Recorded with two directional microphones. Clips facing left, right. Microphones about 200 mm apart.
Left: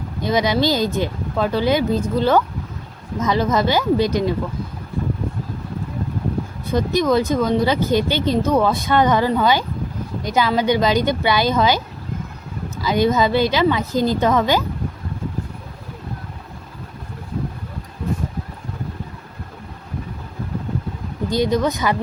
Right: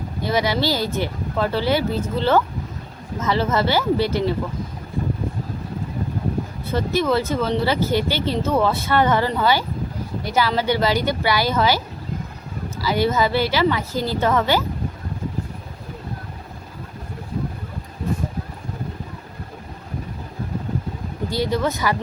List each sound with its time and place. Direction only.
0.2 s speech: 20° left (ahead or behind)
6.7 s speech: 15° left (ahead or behind)
12.8 s speech: 20° left (ahead or behind)
21.2 s speech: 20° left (ahead or behind)